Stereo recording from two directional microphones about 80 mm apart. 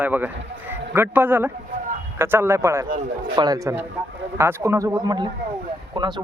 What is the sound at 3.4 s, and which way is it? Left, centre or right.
Speech, right.